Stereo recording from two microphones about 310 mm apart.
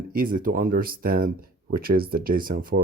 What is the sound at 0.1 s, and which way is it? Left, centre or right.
Speech, right.